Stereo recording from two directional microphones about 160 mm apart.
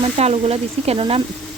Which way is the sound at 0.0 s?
40° right (ahead or behind).